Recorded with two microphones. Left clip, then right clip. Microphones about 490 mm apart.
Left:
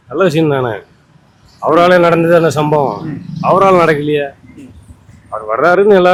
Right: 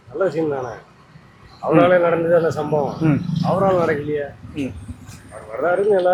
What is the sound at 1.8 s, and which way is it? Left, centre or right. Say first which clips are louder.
Speech: left 6 dB; left.